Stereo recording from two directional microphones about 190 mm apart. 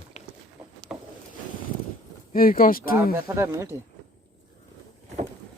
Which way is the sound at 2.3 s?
50° left (ahead or behind).